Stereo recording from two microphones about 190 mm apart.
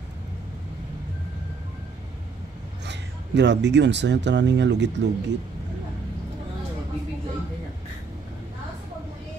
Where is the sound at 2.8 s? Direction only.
65° right (ahead or behind).